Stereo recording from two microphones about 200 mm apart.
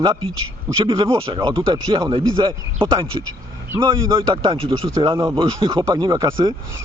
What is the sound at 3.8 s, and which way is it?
Speech, 20° right (ahead or behind).